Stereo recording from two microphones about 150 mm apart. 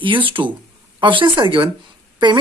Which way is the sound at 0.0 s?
35° right (ahead or behind).